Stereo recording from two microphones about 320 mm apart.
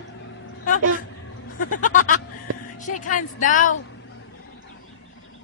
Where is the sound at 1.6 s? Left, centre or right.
Left.